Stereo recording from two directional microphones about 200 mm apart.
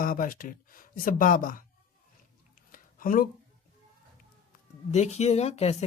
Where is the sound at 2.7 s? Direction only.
45° left (ahead or behind).